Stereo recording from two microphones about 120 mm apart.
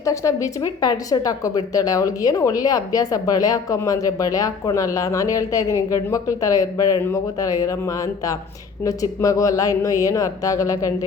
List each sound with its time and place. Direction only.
0.0 s speech: 25° left (ahead or behind)